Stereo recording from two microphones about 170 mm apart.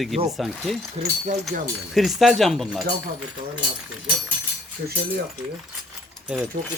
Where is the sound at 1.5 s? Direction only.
50° right (ahead or behind).